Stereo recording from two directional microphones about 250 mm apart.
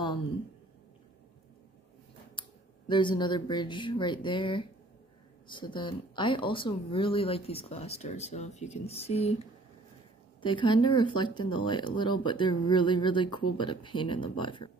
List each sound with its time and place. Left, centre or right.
2.9 s speech: centre